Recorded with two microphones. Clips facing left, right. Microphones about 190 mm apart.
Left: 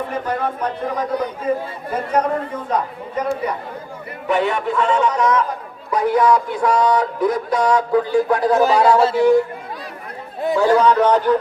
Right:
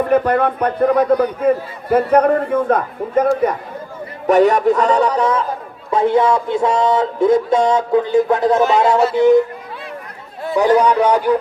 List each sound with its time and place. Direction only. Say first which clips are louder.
0.1 s a man's voice: right 8 dB; 60° right (ahead or behind); by 9.4 s 20° right (ahead or behind)
10.6 s speech: right 2 dB; 15° right (ahead or behind)